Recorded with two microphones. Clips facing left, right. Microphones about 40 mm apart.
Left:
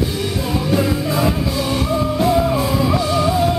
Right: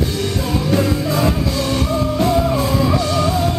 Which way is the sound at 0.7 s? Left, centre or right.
Centre.